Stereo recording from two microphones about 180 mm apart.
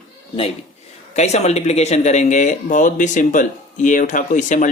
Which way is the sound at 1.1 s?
40° left (ahead or behind).